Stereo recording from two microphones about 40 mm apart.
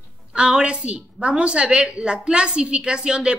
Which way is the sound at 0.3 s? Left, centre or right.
Right.